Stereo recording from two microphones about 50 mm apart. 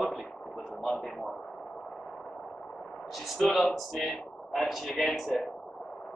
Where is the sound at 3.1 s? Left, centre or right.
Centre.